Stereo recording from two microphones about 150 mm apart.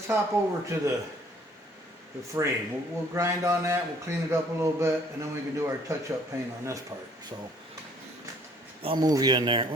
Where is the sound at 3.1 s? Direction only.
20° right (ahead or behind).